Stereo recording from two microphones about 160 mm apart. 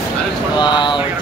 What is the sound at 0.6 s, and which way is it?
Speech, 30° left (ahead or behind).